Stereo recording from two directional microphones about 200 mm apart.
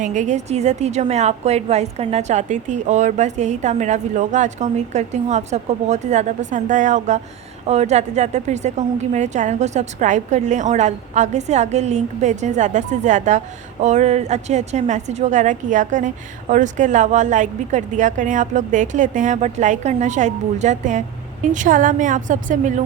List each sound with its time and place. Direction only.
0.0 s a woman's voice: 40° right (ahead or behind)